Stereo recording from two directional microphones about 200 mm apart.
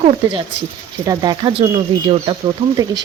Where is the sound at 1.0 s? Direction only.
20° right (ahead or behind).